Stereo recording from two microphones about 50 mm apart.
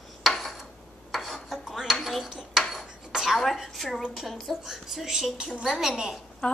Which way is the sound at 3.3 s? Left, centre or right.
Centre.